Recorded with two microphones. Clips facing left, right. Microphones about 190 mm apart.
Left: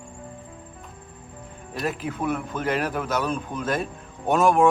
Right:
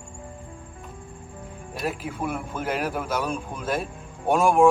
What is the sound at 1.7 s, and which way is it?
A man's voice, 5° right (ahead or behind).